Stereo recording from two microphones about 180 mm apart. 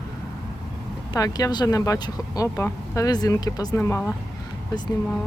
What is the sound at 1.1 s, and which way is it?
Speech, 20° left (ahead or behind).